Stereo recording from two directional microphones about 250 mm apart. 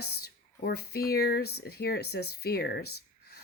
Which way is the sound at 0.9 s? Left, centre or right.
Left.